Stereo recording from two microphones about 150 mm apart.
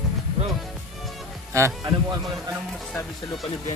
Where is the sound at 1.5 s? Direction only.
20° right (ahead or behind).